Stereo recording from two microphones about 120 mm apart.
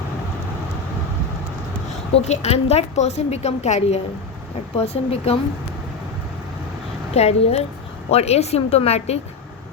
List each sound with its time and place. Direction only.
2.2 s a woman's voice: 65° left (ahead or behind)
7.1 s a woman's voice: 60° left (ahead or behind)